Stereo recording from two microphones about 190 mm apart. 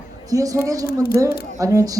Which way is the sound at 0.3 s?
20° right (ahead or behind).